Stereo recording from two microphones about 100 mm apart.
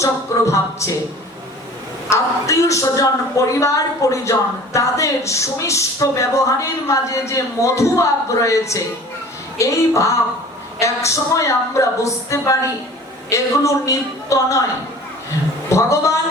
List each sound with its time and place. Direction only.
0.0 s a woman's voice: 30° left (ahead or behind)
2.0 s a woman's voice: 30° left (ahead or behind)
15.7 s a woman's voice: 30° left (ahead or behind)